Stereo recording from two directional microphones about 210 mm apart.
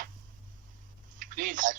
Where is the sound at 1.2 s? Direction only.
40° right (ahead or behind).